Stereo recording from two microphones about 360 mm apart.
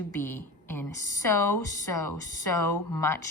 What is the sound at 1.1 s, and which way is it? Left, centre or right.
Speech, left.